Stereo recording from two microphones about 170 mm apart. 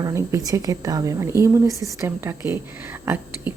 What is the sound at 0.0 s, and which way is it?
A woman's voice, 15° right (ahead or behind).